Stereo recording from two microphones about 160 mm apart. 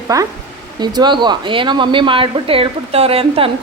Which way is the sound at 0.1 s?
20° right (ahead or behind).